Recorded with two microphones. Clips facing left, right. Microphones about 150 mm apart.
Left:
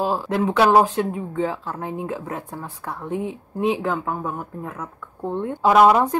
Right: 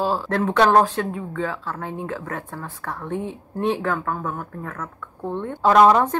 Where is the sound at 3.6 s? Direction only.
5° left (ahead or behind).